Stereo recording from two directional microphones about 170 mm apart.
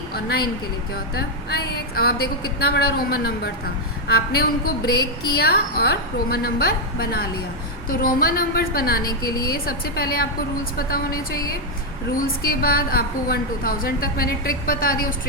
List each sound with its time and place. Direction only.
0.1 s a woman's voice: 65° left (ahead or behind)
9.0 s a woman's voice: 25° left (ahead or behind)
9.5 s a woman's voice: 60° left (ahead or behind)
12.1 s a woman's voice: 60° left (ahead or behind)